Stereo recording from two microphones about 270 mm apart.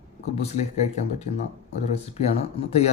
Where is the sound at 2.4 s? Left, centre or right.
Left.